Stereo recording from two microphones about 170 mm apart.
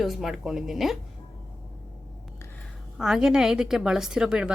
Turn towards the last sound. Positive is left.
turn(degrees=-5)  # may be behind; listen again after turning